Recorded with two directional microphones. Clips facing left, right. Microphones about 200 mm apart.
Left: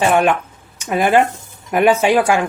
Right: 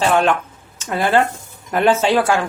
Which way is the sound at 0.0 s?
15° left (ahead or behind).